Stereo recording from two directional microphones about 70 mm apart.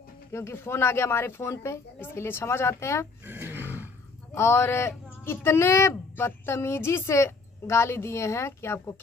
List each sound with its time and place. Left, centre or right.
0.3 s a woman's voice: left
3.3 s a sound: right
4.3 s a woman's voice: left